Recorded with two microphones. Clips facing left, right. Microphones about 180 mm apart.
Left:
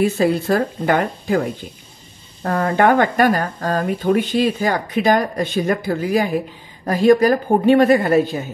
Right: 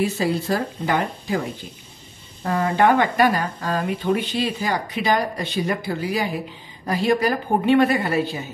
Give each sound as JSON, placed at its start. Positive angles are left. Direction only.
{"t": 0.0, "sound": "speech", "side_deg": 55}
{"t": 2.4, "sound": "speech", "side_deg": 55}